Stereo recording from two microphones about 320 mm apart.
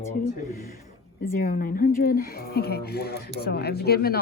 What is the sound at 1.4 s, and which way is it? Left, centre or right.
Speech, left.